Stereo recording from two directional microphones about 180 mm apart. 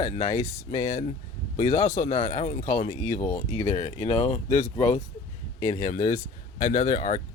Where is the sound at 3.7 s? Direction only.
35° left (ahead or behind).